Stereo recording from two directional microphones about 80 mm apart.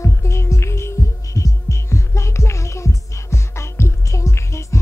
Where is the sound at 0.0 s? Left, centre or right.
Left.